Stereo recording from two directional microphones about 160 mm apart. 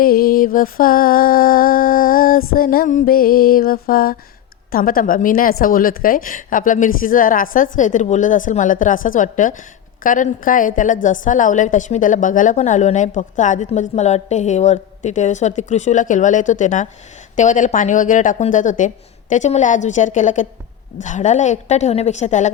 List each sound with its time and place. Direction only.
0.0 s a woman's voice: 65° left (ahead or behind); by 22.5 s 50° left (ahead or behind)